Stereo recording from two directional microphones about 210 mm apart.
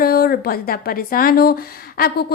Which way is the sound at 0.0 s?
45° left (ahead or behind).